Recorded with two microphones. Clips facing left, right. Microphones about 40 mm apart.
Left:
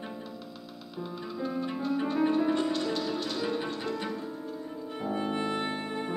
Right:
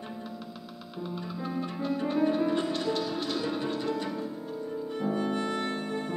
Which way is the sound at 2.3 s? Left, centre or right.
Centre.